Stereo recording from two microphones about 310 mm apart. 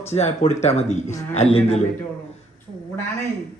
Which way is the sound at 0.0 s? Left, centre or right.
Left.